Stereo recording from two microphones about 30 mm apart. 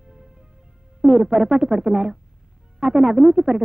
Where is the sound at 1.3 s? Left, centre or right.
Right.